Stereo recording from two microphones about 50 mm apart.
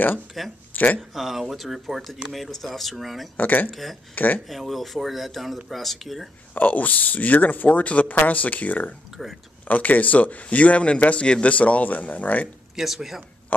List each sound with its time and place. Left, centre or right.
0.4 s speech: centre
0.7 s a sound: left
1.1 s speech: centre
3.3 s speech: left
4.5 s speech: centre
6.5 s speech: left
9.2 s speech: centre
9.7 s speech: left
12.7 s speech: centre
13.5 s speech: left